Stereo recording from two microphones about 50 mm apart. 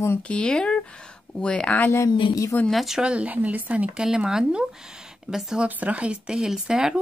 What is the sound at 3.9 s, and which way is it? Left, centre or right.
Speech, centre.